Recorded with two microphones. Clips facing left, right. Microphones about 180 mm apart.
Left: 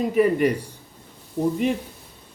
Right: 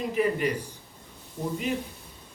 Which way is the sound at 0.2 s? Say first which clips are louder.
Left 7 dB; 55° left (ahead or behind).